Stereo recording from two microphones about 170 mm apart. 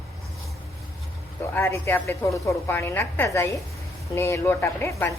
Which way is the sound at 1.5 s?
15° left (ahead or behind).